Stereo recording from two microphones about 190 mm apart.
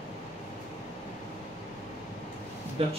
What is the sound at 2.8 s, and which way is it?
Speech, 30° right (ahead or behind).